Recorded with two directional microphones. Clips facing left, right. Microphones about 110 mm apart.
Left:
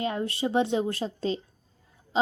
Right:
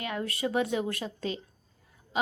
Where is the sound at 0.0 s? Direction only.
30° left (ahead or behind).